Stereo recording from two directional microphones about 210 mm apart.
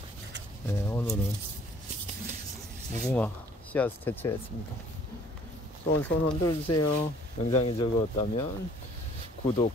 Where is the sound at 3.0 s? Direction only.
5° left (ahead or behind).